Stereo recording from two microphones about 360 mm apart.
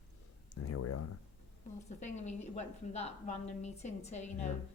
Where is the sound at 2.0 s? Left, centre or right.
Centre.